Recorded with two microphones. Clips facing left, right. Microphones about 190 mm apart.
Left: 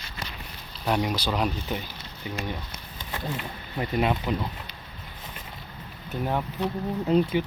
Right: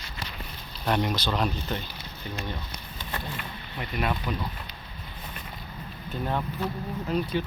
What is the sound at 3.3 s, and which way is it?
Speech, 25° left (ahead or behind).